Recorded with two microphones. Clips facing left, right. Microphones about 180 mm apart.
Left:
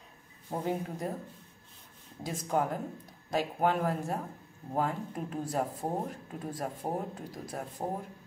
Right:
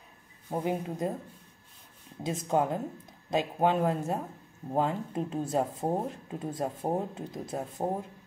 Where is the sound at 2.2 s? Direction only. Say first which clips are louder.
Right 3 dB; 20° right (ahead or behind).